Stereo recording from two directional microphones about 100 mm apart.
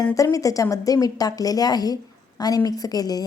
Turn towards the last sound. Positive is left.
turn(degrees=40)  # may be behind; listen again after turning